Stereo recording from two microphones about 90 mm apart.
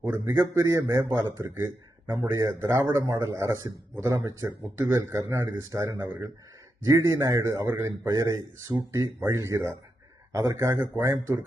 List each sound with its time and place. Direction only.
0.0 s a man's voice: 25° right (ahead or behind)
3.0 s a man's voice: 40° right (ahead or behind)
8.1 s a man's voice: 40° right (ahead or behind)